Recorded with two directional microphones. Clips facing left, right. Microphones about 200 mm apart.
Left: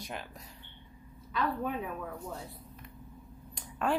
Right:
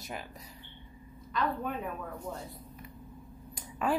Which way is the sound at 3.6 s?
5° right (ahead or behind).